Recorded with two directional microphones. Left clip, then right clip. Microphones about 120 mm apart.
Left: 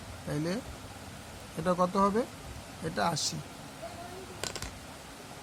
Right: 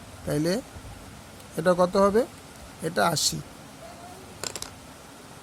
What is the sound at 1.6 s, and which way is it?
Speech, 85° right.